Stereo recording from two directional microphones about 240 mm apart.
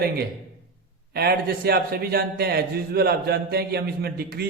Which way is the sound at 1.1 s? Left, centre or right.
Right.